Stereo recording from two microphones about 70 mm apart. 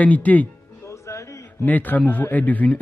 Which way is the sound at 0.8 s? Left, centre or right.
Left.